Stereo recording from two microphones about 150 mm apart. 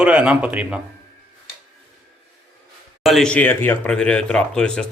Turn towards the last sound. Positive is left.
turn(degrees=5)  # may be behind; listen again after turning